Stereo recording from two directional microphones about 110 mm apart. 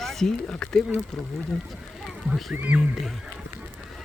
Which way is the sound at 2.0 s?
Centre (ahead or behind).